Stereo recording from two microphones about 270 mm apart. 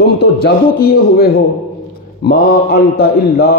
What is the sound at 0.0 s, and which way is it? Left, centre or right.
A man's voice, left.